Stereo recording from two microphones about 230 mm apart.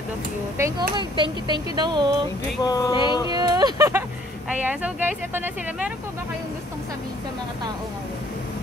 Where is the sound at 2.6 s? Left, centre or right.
Centre.